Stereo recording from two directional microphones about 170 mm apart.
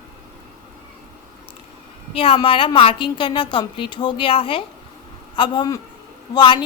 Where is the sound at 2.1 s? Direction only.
35° left (ahead or behind).